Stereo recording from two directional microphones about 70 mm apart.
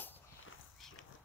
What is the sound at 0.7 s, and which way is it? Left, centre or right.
Horse, centre.